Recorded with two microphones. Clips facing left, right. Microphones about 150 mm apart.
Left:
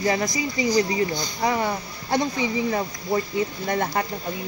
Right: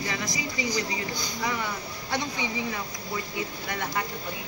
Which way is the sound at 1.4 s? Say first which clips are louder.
Left 8 dB; 40° left (ahead or behind).